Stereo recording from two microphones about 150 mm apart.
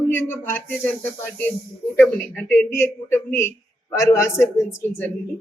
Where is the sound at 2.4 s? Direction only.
15° left (ahead or behind).